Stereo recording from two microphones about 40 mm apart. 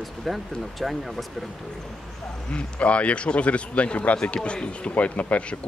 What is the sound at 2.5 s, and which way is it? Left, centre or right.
Speech, left.